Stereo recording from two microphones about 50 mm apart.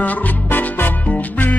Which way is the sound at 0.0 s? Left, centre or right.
Left.